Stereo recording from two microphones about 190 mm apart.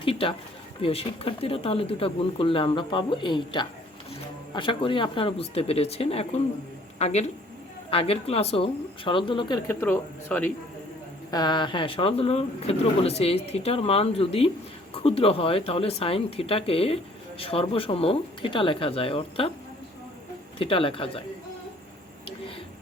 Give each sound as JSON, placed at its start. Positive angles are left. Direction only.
{"t": 0.0, "sound": "a sound", "side_deg": 30}
{"t": 0.8, "sound": "speech", "side_deg": 30}
{"t": 9.6, "sound": "speech", "side_deg": 10}
{"t": 11.3, "sound": "speech", "side_deg": 20}
{"t": 20.6, "sound": "speech", "side_deg": 30}